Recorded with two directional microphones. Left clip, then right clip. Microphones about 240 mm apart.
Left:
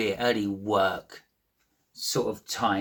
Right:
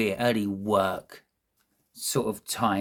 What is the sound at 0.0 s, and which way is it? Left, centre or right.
Speech, right.